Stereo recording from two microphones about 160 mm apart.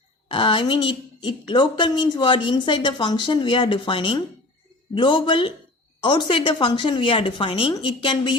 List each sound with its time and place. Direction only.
0.3 s a woman's voice: 35° left (ahead or behind)